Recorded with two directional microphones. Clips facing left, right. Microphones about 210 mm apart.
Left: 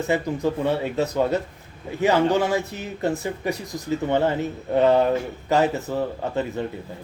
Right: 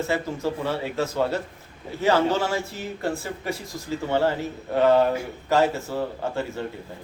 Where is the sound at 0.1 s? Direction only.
20° left (ahead or behind).